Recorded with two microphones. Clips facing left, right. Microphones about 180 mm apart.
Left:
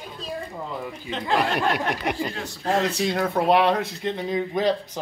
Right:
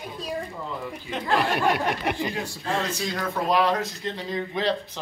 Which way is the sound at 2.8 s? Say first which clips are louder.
Left 5 dB; 65° left (ahead or behind).